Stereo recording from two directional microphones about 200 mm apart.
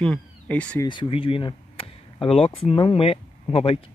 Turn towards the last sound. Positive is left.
turn(degrees=30)  # may be behind; listen again after turning